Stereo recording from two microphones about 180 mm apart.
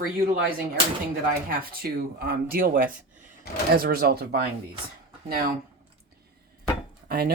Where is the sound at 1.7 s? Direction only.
55° right (ahead or behind).